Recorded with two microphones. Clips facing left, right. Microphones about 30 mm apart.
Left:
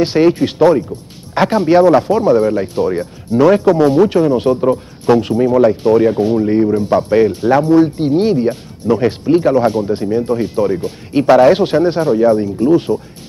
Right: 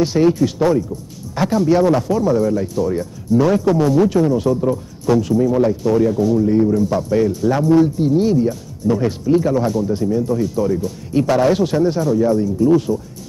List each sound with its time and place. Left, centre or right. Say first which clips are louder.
0.0 s speech: left 3 dB; left